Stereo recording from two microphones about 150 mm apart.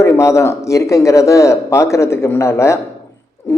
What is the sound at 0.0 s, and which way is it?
A man's voice, 20° left (ahead or behind).